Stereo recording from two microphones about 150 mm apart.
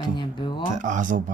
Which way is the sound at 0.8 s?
55° right (ahead or behind).